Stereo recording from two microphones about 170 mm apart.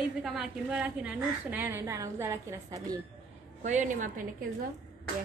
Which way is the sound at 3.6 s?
45° right (ahead or behind).